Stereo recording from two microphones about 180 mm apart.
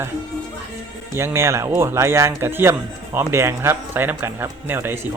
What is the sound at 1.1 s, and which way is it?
Speech, 15° right (ahead or behind).